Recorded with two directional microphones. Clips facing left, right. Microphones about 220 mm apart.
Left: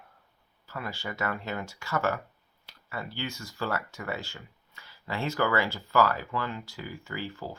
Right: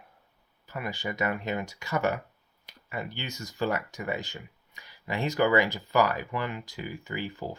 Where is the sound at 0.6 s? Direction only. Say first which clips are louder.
Right 3 dB; 15° right (ahead or behind).